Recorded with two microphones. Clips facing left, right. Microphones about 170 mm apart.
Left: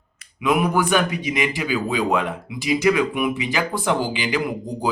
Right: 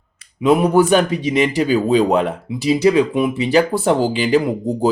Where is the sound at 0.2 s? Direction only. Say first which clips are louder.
Right 6 dB; 35° right (ahead or behind).